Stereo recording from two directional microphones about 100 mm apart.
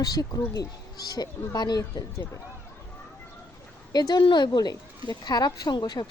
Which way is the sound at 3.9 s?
45° left (ahead or behind).